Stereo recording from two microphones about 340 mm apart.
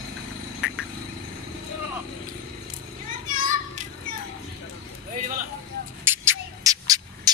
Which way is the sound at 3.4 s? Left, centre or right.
Right.